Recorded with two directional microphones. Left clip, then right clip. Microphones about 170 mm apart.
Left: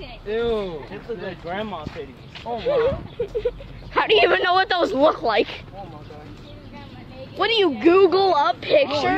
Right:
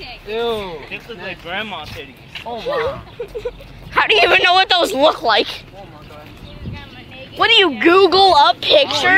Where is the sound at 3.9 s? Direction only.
20° left (ahead or behind).